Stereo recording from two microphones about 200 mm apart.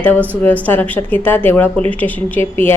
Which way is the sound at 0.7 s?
10° left (ahead or behind).